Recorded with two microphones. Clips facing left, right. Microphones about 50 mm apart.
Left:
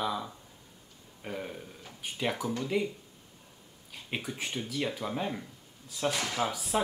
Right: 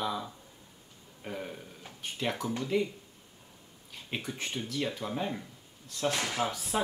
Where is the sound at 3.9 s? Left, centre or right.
Centre.